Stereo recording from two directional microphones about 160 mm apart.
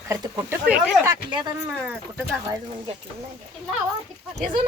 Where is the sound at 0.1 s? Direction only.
15° right (ahead or behind).